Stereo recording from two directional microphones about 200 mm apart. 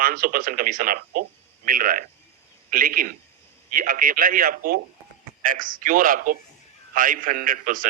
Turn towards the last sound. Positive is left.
turn(degrees=-45)  # may be behind; listen again after turning